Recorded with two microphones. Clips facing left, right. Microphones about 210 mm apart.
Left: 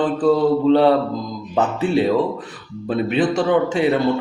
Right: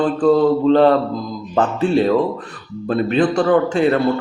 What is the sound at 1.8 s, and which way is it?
A man's voice, 5° left (ahead or behind).